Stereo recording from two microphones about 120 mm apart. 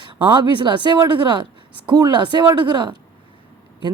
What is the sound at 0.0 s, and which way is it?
Speech, 45° right (ahead or behind).